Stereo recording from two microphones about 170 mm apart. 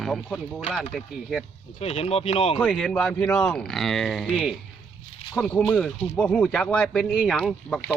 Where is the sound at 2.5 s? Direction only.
Centre (ahead or behind).